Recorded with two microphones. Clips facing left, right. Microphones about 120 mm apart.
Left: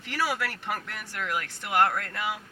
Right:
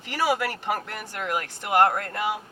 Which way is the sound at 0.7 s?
35° right (ahead or behind).